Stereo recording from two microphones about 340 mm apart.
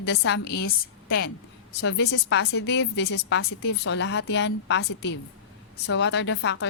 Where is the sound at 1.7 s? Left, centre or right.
Left.